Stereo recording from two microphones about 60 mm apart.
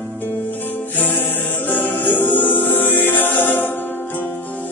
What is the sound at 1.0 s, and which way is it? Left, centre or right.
Music, left.